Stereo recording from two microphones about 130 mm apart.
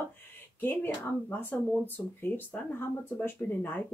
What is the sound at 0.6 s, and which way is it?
Speech, 15° left (ahead or behind).